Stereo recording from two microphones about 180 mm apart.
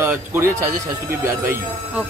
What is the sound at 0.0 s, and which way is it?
Speech, 10° right (ahead or behind).